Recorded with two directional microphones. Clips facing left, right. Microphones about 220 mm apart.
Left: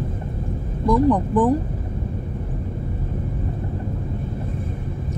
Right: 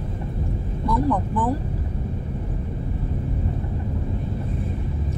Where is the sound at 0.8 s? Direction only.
15° left (ahead or behind).